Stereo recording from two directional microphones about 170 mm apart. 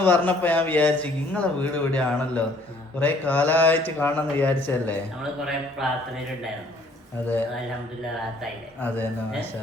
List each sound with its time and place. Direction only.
0.0 s speech: 10° left (ahead or behind)
5.8 s mantra: centre (ahead or behind)
7.2 s speech: 10° left (ahead or behind)